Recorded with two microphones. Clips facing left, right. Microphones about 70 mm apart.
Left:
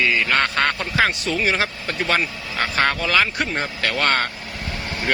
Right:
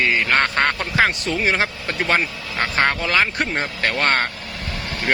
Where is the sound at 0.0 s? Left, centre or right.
Right.